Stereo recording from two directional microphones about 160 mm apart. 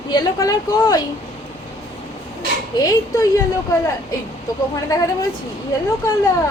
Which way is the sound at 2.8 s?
20° left (ahead or behind).